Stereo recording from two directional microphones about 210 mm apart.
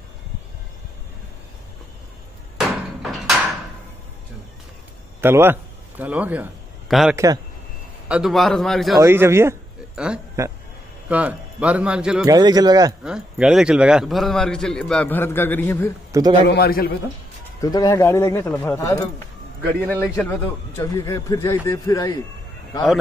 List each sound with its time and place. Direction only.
2.5 s a sound: centre (ahead or behind)
5.2 s a man's voice: 10° right (ahead or behind)
9.0 s a man's voice: 10° right (ahead or behind)
12.3 s speech: 20° right (ahead or behind)
13.0 s a man's voice: 5° right (ahead or behind)
16.1 s a man's voice: 20° right (ahead or behind)
16.4 s a man's voice: 50° left (ahead or behind)
17.6 s a man's voice: 15° left (ahead or behind)
20.2 s a man's voice: 10° left (ahead or behind)